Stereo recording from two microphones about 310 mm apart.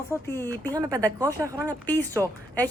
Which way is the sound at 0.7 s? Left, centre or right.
Centre.